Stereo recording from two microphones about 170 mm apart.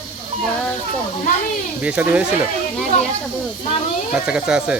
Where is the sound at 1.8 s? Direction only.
10° right (ahead or behind).